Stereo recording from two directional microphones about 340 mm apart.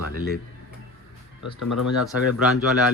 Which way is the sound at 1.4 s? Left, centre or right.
Left.